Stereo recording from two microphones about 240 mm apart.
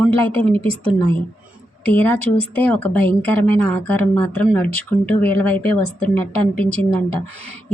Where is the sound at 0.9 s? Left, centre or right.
Centre.